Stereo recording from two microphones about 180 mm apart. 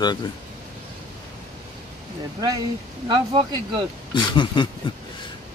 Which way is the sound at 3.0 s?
25° right (ahead or behind).